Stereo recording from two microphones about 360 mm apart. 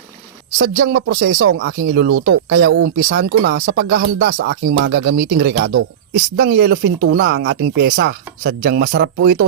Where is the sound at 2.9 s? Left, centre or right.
Right.